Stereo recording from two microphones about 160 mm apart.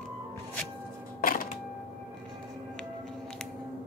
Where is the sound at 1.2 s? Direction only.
60° left (ahead or behind).